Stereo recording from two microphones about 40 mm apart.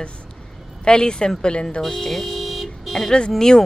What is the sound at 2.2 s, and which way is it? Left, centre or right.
Vehicle, centre.